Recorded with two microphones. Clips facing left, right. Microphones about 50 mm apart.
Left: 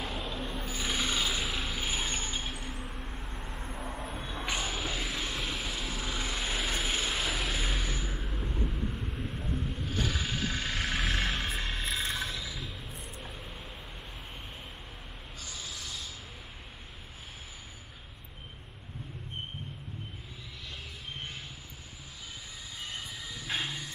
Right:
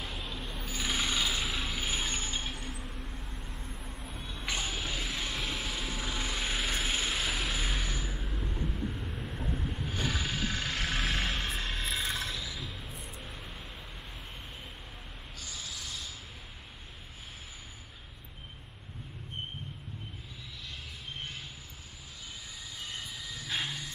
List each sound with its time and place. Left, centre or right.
0.0 s a sound: centre
3.3 s vehicle: centre
4.5 s vehicle: centre
9.3 s vehicle: centre
10.0 s music: centre
11.9 s a sound: centre
13.2 s vehicle: centre
15.4 s a sound: centre
23.0 s music: centre